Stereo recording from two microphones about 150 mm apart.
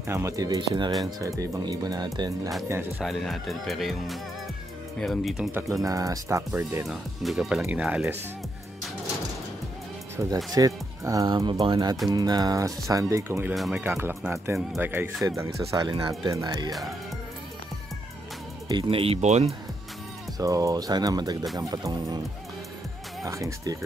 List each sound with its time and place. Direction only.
0.1 s speech: 20° right (ahead or behind)
3.0 s speech: centre (ahead or behind)
5.8 s speech: 20° right (ahead or behind)
6.9 s speech: 5° right (ahead or behind)
10.1 s speech: 25° right (ahead or behind)
13.6 s speech: 5° right (ahead or behind)
13.8 s speech: 15° right (ahead or behind)
18.7 s speech: 35° right (ahead or behind)
20.3 s speech: 25° right (ahead or behind)
23.2 s speech: 20° right (ahead or behind)